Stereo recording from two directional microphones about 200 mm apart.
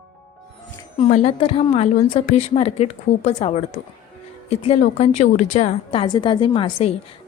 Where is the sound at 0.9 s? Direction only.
30° left (ahead or behind).